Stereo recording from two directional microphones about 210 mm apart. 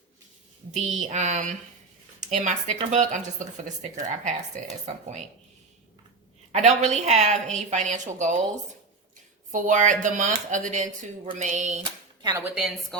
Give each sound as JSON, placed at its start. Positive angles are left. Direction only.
{"t": 1.0, "sound": "speech", "side_deg": -35}
{"t": 6.5, "sound": "speech", "side_deg": -35}
{"t": 9.5, "sound": "speech", "side_deg": -35}
{"t": 12.2, "sound": "a woman's voice", "side_deg": -15}
{"t": 12.5, "sound": "a woman's voice", "side_deg": 0}